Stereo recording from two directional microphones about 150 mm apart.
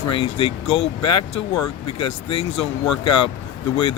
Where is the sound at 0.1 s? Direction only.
35° left (ahead or behind).